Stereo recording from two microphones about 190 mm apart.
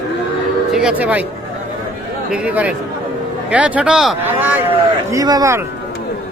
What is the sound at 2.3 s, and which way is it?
A man's voice, 5° right (ahead or behind).